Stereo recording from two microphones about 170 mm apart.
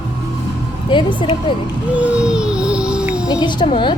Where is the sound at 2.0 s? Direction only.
5° right (ahead or behind).